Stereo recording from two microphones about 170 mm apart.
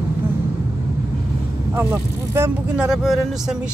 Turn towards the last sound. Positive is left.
turn(degrees=-5)  # may be behind; listen again after turning